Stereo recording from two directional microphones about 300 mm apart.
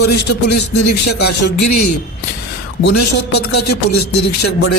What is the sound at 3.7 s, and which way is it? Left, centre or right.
Speech, left.